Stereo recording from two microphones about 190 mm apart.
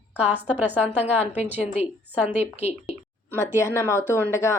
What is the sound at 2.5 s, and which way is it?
Speech, 35° left (ahead or behind).